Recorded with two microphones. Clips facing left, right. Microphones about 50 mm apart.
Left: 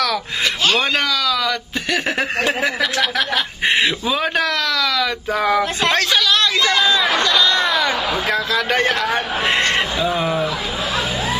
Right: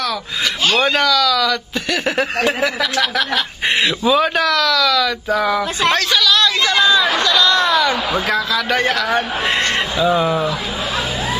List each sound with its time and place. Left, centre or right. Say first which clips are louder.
0.7 s speech: right 3 dB; centre
1.0 s speech: right 4 dB; centre
2.1 s a man's voice: right 2 dB; centre
4.5 s speech: right 4 dB; left
5.4 s speech: left 3 dB; left
5.9 s a sound: right 1 dB; left
6.7 s chatter: right 2 dB; centre
8.5 s speech: even; centre
9.9 s speech: right 3 dB; centre